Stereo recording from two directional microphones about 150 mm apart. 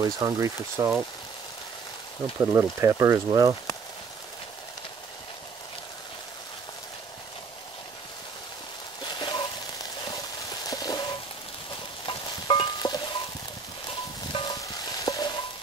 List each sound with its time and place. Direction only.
0.0 s speech: 25° right (ahead or behind)
2.4 s speech: 15° right (ahead or behind)
9.0 s a sound: 30° left (ahead or behind)
12.1 s stir: 35° left (ahead or behind)
14.3 s music: 35° left (ahead or behind)
14.6 s stir: 25° left (ahead or behind)